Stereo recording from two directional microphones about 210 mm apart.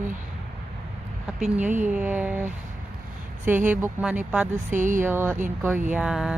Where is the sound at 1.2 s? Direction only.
5° right (ahead or behind).